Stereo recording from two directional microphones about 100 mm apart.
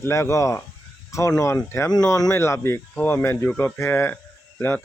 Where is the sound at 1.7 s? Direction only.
30° left (ahead or behind).